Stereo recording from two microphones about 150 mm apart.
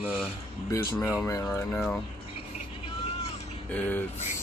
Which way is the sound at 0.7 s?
20° left (ahead or behind).